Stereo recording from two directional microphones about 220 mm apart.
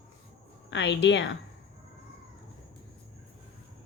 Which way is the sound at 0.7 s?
55° left (ahead or behind).